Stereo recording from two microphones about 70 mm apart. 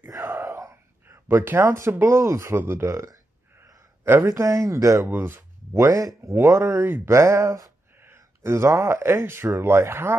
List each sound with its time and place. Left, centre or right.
0.1 s wail: right
0.4 s wail: right
1.0 s speech: right
4.0 s a man's voice: right
4.3 s speech: right
5.1 s speech: right